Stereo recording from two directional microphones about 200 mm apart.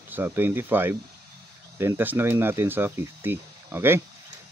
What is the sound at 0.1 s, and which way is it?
Speech, 10° right (ahead or behind).